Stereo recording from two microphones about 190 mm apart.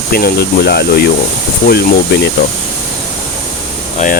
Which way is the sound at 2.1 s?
60° left (ahead or behind).